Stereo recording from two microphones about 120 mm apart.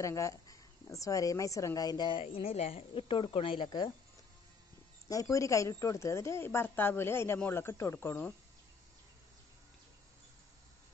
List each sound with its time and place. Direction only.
0.0 s speech: 25° left (ahead or behind); by 3.9 s 45° left (ahead or behind)
5.0 s speech: 25° left (ahead or behind)